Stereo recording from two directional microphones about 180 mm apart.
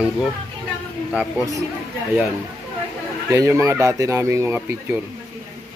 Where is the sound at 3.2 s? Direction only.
15° right (ahead or behind).